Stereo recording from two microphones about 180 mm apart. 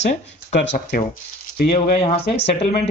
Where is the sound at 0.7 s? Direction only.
45° left (ahead or behind).